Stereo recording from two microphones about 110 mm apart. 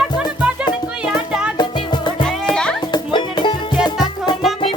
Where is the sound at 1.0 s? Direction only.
5° right (ahead or behind).